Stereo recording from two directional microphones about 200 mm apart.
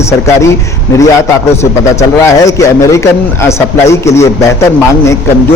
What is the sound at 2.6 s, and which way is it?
A man's voice, 15° left (ahead or behind).